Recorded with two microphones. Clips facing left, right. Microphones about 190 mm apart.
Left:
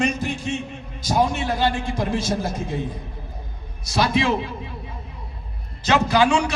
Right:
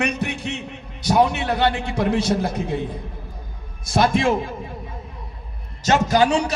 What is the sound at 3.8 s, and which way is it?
Speech, 50° right (ahead or behind).